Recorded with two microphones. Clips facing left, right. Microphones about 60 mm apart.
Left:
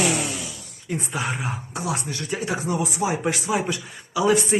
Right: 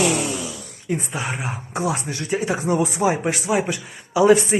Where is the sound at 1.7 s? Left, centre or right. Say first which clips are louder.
Right 6 dB; right.